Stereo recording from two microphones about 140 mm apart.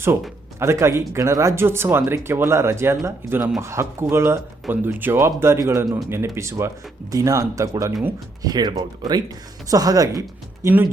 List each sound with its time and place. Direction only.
0.6 s speech: 20° right (ahead or behind)